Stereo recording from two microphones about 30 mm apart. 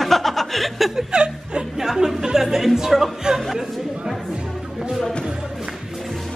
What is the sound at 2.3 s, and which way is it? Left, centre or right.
Music, centre.